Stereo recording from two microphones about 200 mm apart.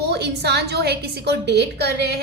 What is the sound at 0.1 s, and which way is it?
A woman's voice, 55° right (ahead or behind).